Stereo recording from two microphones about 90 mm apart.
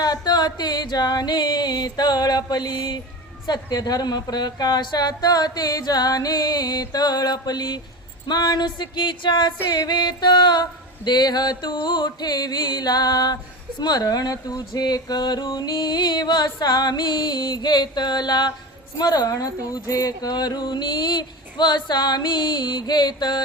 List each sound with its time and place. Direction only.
0.0 s music: 50° left (ahead or behind)
9.6 s music: 45° left (ahead or behind)